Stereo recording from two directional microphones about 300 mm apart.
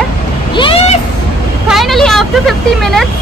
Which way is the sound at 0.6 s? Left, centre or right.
Centre.